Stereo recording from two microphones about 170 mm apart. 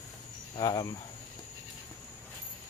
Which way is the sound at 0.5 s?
25° left (ahead or behind).